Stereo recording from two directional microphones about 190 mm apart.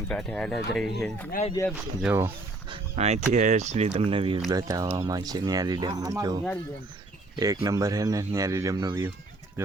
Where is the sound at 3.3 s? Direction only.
40° right (ahead or behind).